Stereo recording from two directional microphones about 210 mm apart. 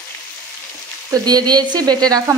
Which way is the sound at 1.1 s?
20° right (ahead or behind).